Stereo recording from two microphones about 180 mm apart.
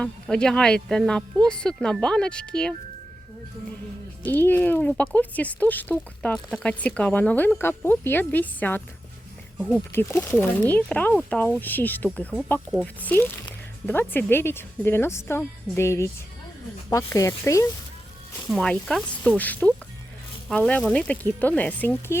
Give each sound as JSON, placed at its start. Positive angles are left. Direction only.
{"t": 0.0, "sound": "speech", "side_deg": 5}
{"t": 4.3, "sound": "speech", "side_deg": 10}
{"t": 18.5, "sound": "speech", "side_deg": 5}